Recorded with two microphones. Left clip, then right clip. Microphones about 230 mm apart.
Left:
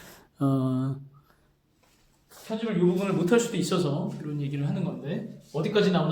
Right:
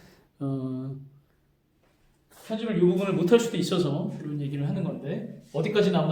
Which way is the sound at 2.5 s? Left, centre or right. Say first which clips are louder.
Right 2 dB; centre.